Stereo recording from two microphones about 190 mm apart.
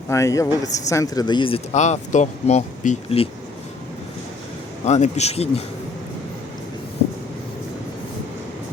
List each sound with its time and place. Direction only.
0.1 s speech: 15° left (ahead or behind); by 3.2 s 35° left (ahead or behind)
4.9 s speech: 35° left (ahead or behind)